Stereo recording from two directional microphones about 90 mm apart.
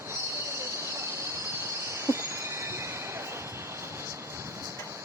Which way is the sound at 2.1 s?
30° right (ahead or behind).